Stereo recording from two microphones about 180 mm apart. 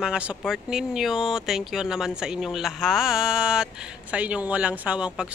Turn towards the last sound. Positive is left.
turn(degrees=-5)  # may be behind; listen again after turning